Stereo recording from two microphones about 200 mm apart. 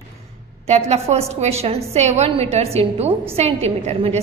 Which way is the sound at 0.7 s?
30° right (ahead or behind).